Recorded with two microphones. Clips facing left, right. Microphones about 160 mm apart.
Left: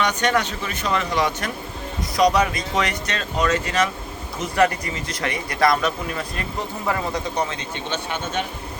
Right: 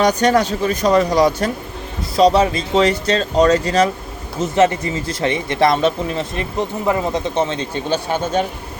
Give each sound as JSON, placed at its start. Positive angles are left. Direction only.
{"t": 0.0, "sound": "speech", "side_deg": -35}
{"t": 4.4, "sound": "speech", "side_deg": -25}